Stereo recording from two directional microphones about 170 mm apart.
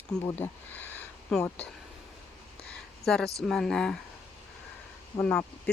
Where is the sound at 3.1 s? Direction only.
5° left (ahead or behind).